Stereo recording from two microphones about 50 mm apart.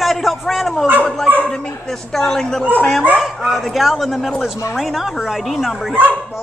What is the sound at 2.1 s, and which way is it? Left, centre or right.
Speech, centre.